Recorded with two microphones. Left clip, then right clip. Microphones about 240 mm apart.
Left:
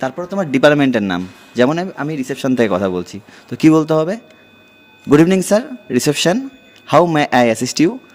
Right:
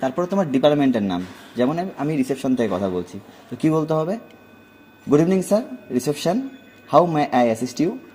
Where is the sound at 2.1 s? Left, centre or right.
Centre.